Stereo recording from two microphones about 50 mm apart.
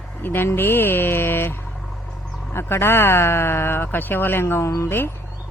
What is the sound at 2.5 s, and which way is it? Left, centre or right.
Speech, left.